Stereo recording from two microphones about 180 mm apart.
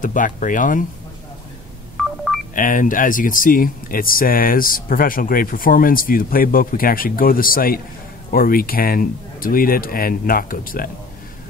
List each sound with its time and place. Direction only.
0.0 s speech: 45° left (ahead or behind)
2.0 s telephone dialing: centre (ahead or behind)
2.5 s speech: 50° left (ahead or behind)